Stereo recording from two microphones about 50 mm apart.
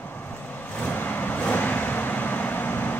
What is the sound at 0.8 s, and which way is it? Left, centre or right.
Vehicle, left.